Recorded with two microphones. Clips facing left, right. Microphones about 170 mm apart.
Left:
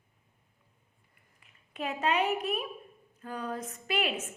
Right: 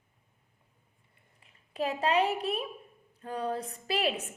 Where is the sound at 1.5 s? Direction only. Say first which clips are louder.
Right 4 dB; 35° right (ahead or behind).